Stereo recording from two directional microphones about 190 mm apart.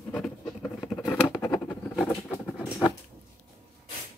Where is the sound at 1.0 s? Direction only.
20° left (ahead or behind).